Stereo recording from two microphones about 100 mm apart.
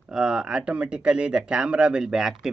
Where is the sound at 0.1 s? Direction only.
5° right (ahead or behind).